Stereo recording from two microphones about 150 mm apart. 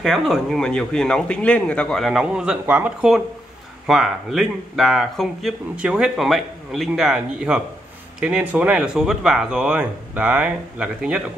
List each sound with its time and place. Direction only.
0.0 s speech: centre (ahead or behind)